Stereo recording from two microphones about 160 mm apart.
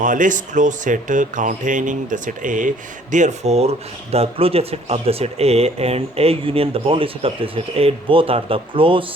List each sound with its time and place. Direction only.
0.0 s speech: 55° right (ahead or behind); by 9.0 s 35° right (ahead or behind)